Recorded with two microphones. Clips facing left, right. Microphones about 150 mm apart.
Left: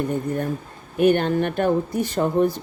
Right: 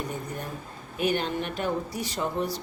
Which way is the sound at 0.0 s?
55° left (ahead or behind).